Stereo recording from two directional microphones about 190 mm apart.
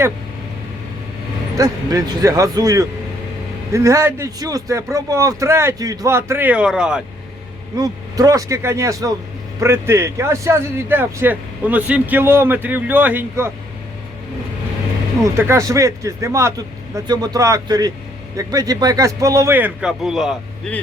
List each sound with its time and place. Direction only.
1.5 s a man's voice: 20° right (ahead or behind)
7.8 s a man's voice: 20° right (ahead or behind)
15.2 s a man's voice: 15° right (ahead or behind)